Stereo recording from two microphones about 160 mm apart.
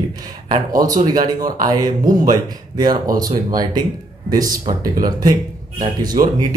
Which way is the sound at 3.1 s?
25° right (ahead or behind).